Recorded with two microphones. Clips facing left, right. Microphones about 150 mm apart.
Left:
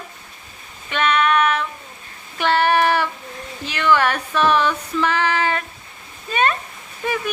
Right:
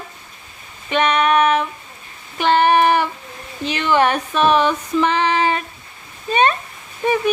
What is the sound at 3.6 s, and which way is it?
Female singing, 20° right (ahead or behind).